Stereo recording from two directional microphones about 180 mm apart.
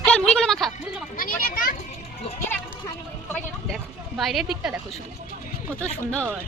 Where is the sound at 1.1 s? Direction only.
50° left (ahead or behind).